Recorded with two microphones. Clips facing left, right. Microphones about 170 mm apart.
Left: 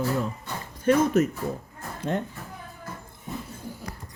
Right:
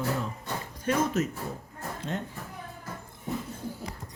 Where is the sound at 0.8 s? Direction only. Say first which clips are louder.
Left 7 dB; 55° left (ahead or behind).